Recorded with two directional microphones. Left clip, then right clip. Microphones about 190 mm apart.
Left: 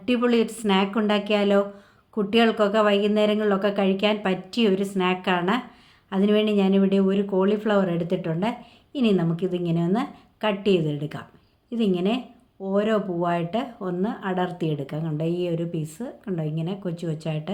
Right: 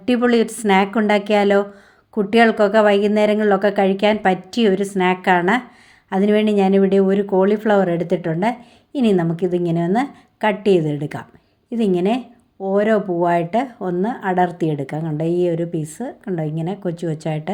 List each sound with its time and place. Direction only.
0.0 s speech: 35° right (ahead or behind)